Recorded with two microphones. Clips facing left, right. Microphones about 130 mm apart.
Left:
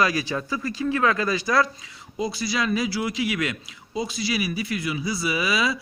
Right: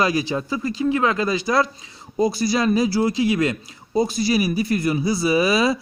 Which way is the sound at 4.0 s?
45° right (ahead or behind).